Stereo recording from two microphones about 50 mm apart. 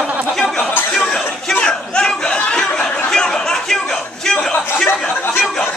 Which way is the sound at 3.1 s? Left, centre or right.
Centre.